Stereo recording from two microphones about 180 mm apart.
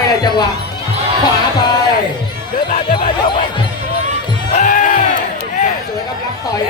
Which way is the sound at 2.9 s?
25° left (ahead or behind).